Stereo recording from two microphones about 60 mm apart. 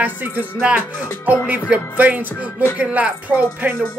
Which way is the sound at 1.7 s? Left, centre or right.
Right.